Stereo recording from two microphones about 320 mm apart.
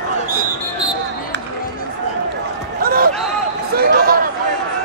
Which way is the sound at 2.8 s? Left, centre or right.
Right.